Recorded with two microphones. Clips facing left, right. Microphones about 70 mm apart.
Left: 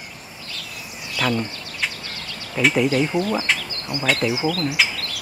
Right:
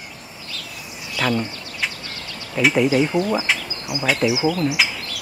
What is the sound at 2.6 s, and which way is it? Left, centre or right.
Speech, centre.